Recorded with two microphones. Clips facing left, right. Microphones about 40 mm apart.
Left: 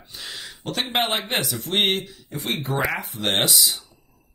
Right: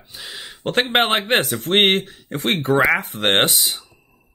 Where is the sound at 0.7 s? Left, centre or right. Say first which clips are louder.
Right 6 dB; right.